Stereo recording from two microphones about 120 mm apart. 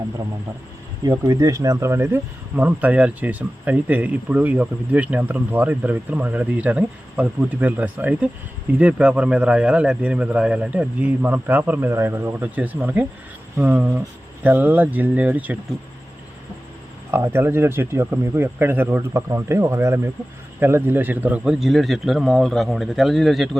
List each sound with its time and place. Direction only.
1.2 s speech: 30° right (ahead or behind); by 15.5 s 15° right (ahead or behind)
17.1 s a man's voice: 20° right (ahead or behind); by 23.5 s centre (ahead or behind)